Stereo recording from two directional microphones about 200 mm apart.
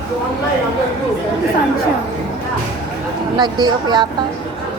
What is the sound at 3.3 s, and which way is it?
Speech, 20° right (ahead or behind).